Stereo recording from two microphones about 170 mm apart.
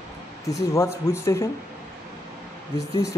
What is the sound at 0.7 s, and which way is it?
Speech, 15° left (ahead or behind).